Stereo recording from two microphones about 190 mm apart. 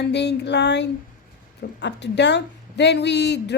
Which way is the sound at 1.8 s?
65° left (ahead or behind).